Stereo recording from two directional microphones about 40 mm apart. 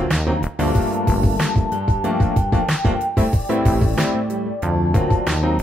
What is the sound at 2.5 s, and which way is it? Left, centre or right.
Music, centre.